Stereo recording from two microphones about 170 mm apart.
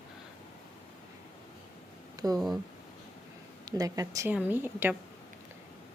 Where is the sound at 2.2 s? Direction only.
20° right (ahead or behind).